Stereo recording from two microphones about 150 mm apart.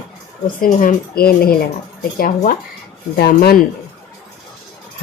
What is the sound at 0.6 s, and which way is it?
Speech, 65° left (ahead or behind).